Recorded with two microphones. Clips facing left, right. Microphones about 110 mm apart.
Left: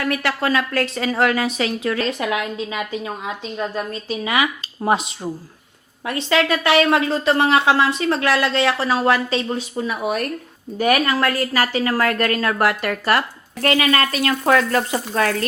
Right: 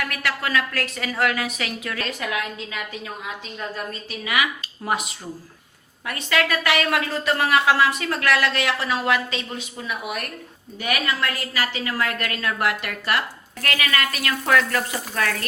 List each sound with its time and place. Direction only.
0.0 s a woman's voice: 30° left (ahead or behind)
13.6 s frying: 30° left (ahead or behind)